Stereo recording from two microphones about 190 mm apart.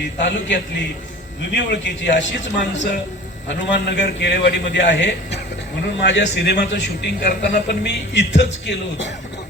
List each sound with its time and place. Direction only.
0.0 s a man's voice: 70° left (ahead or behind)